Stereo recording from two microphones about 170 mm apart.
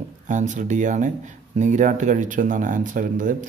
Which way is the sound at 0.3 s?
45° right (ahead or behind).